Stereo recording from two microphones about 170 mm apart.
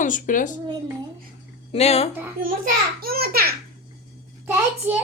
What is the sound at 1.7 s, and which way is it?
Speech, 35° left (ahead or behind).